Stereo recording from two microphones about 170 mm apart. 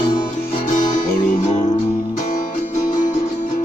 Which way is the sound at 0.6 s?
45° left (ahead or behind).